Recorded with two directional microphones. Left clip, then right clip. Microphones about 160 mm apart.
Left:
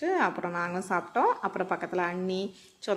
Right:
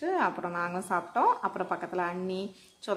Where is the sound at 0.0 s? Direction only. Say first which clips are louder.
Left 1 dB; 10° left (ahead or behind).